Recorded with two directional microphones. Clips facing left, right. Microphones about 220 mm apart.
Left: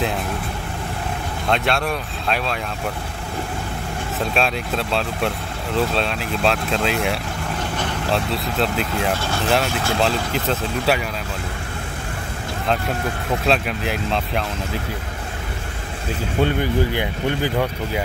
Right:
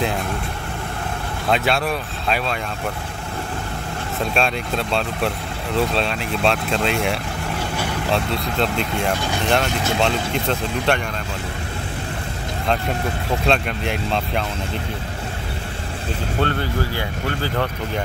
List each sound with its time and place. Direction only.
1.5 s speech: centre (ahead or behind)
4.2 s speech: centre (ahead or behind)
13.5 s speech: centre (ahead or behind)
16.3 s speech: 15° left (ahead or behind)